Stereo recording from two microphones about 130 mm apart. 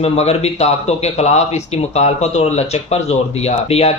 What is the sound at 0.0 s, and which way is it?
Speech, 50° left (ahead or behind).